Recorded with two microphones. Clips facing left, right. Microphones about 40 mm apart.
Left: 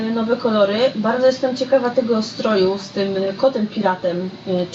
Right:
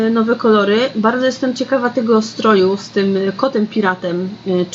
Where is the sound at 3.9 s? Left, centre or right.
Right.